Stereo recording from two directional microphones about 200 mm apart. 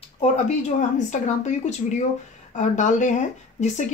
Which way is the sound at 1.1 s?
35° left (ahead or behind).